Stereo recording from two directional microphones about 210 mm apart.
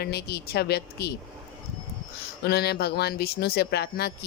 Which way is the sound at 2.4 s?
50° left (ahead or behind).